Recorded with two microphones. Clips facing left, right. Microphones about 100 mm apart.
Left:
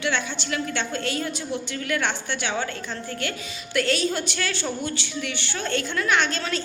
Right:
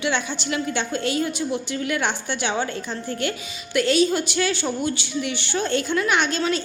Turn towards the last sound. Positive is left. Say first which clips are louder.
# right 2 dB
turn(degrees=-10)  # may be behind; listen again after turning